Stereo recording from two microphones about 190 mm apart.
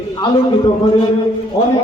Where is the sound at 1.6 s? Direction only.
20° left (ahead or behind).